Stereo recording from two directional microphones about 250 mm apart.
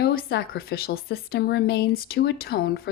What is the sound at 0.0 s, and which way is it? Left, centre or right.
Speech, left.